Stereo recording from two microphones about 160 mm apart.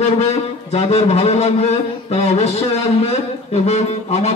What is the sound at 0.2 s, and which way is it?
A man's voice, 40° left (ahead or behind).